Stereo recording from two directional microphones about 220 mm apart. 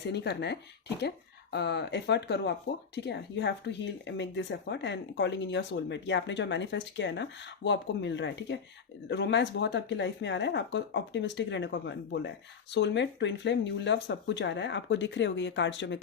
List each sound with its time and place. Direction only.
0.1 s speech: 50° left (ahead or behind)